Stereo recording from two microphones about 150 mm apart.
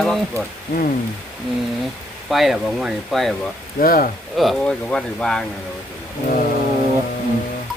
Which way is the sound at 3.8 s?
70° left (ahead or behind).